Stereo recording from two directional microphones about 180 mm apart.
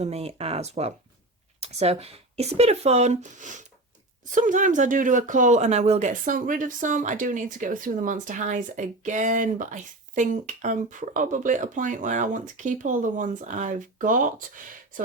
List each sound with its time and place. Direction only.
0.0 s speech: 35° right (ahead or behind)